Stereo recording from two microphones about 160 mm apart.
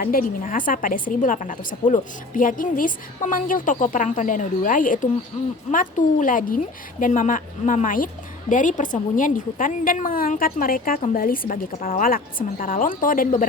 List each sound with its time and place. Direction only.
0.0 s a woman's voice: 60° left (ahead or behind)